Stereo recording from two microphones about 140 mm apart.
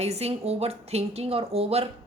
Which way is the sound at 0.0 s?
50° right (ahead or behind).